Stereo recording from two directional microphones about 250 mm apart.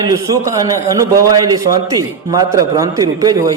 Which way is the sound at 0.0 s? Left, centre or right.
Centre.